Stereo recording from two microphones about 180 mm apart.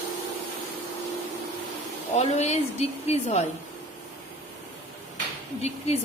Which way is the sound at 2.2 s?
35° left (ahead or behind).